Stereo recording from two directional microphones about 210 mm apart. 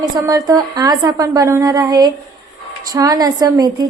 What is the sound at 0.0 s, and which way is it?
A woman's voice, 15° right (ahead or behind).